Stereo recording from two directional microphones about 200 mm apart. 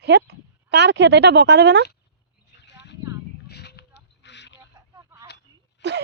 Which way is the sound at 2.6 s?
60° left (ahead or behind).